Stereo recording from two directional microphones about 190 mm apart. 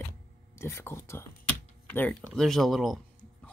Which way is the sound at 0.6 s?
15° left (ahead or behind).